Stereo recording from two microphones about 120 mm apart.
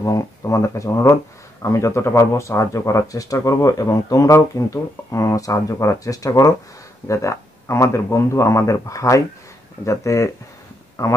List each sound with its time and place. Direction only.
0.0 s speech: 25° left (ahead or behind)